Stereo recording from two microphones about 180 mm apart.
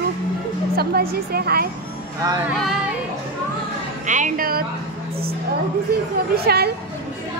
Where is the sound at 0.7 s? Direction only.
60° right (ahead or behind).